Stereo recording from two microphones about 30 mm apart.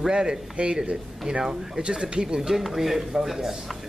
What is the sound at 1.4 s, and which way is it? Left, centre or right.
Speech, centre.